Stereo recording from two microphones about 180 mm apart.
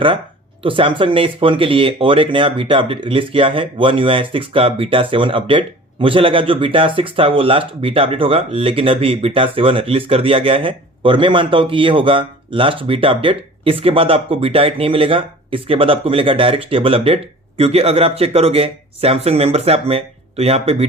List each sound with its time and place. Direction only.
0.6 s speech: 30° right (ahead or behind)